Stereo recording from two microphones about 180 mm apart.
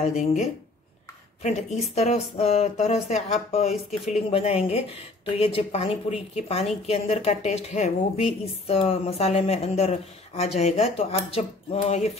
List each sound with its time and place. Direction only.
0.0 s a woman's voice: 40° left (ahead or behind)